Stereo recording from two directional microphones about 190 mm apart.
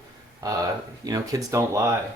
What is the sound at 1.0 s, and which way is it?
Speech, 20° right (ahead or behind).